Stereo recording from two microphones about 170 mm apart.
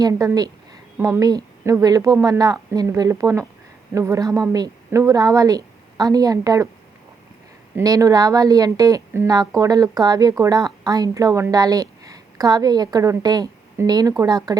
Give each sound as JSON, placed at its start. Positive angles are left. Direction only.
{"t": 0.0, "sound": "a woman's voice", "side_deg": -20}
{"t": 7.8, "sound": "a woman's voice", "side_deg": -20}